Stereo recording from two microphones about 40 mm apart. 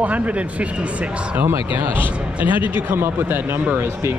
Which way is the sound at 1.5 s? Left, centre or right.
Right.